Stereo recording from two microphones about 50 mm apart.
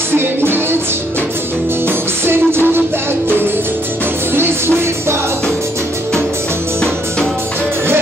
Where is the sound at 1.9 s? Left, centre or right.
Right.